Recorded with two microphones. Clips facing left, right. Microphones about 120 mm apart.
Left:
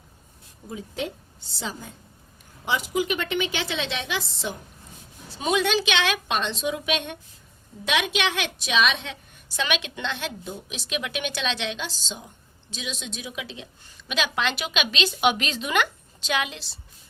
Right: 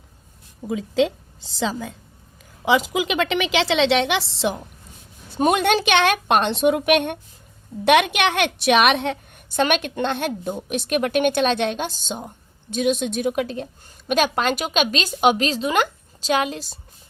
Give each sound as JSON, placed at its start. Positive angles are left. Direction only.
{"t": 0.7, "sound": "a woman's voice", "side_deg": -90}
{"t": 5.3, "sound": "a woman's voice", "side_deg": -55}